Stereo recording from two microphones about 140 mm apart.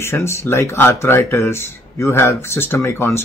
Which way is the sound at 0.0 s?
20° left (ahead or behind).